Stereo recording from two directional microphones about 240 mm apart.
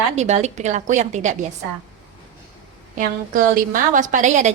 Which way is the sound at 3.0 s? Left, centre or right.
Right.